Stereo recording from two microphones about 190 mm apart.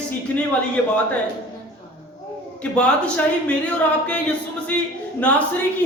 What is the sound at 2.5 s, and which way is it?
Speech, 5° left (ahead or behind).